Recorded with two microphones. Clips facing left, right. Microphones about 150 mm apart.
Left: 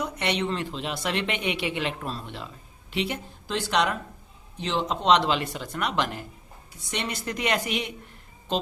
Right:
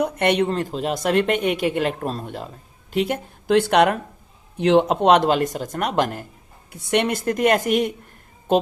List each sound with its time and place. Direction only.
0.0 s speech: 50° right (ahead or behind)
6.7 s speech: 60° right (ahead or behind)